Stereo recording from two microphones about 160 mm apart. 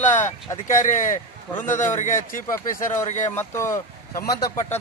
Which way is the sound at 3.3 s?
15° left (ahead or behind).